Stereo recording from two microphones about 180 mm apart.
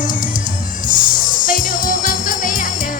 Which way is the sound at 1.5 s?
50° left (ahead or behind).